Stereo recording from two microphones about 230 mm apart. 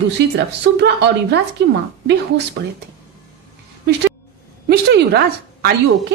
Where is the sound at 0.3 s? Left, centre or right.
Right.